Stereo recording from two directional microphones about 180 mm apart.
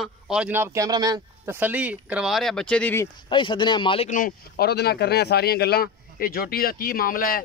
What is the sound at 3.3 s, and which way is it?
Speech, 25° left (ahead or behind).